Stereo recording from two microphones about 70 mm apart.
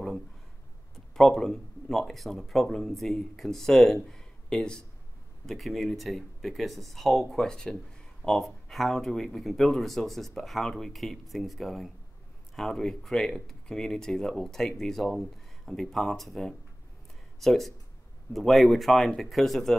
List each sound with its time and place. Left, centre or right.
0.9 s speech: centre